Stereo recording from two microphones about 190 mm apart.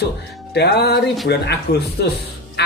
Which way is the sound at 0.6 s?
60° left (ahead or behind).